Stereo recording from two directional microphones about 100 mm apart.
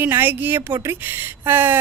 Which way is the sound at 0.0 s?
20° right (ahead or behind).